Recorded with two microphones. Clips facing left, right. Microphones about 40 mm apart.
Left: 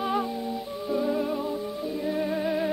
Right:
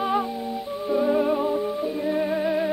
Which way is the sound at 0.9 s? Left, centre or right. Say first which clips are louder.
Right 6 dB; centre.